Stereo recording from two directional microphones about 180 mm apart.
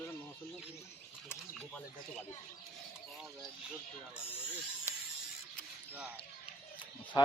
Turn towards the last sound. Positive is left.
turn(degrees=25)  # may be behind; listen again after turning